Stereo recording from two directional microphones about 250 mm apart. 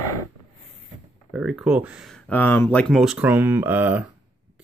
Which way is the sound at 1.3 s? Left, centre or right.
Centre.